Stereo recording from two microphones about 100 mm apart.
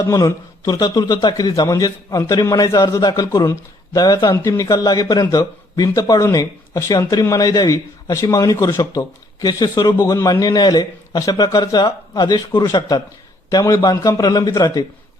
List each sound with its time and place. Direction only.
0.0 s a man's voice: 30° left (ahead or behind)
3.4 s speech: 30° left (ahead or behind)
4.0 s a man's voice: 40° left (ahead or behind)
13.5 s a man's voice: 40° left (ahead or behind)